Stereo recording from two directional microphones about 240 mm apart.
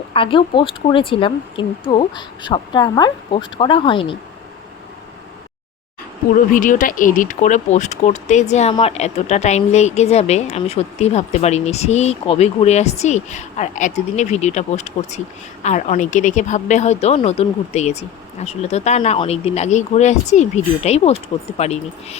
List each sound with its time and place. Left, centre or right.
0.1 s speech: left
6.3 s speech: left